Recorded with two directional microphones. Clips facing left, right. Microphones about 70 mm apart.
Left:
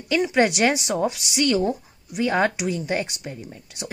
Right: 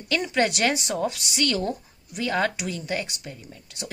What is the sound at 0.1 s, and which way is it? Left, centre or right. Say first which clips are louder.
Speech: left 4 dB; centre.